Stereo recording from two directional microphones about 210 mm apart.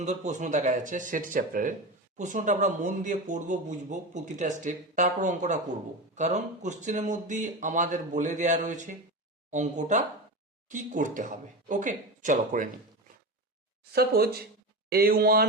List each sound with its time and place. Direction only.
0.0 s speech: 35° right (ahead or behind)
13.9 s speech: 50° right (ahead or behind)